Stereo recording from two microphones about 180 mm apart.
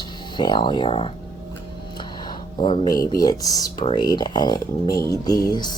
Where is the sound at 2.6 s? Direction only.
25° left (ahead or behind).